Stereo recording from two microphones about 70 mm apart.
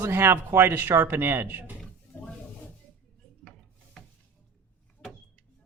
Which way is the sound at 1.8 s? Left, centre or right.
Centre.